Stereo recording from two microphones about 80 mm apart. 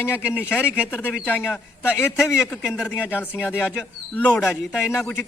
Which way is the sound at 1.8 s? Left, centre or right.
Centre.